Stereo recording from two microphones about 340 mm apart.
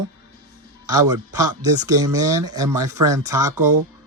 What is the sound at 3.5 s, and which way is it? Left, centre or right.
Speech, right.